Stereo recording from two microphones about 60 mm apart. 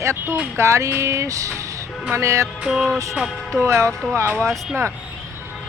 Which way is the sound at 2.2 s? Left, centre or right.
Right.